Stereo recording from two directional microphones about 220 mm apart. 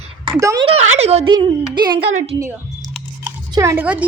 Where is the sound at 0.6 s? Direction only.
30° right (ahead or behind).